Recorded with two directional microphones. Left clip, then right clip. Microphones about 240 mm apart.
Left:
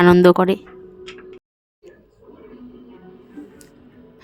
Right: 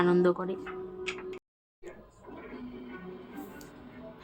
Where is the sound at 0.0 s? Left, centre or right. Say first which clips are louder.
Left 14 dB; left.